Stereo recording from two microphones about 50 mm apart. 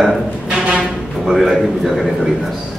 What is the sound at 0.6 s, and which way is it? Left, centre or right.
Music, right.